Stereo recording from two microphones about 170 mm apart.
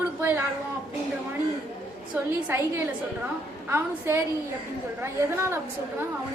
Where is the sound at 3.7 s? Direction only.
15° right (ahead or behind).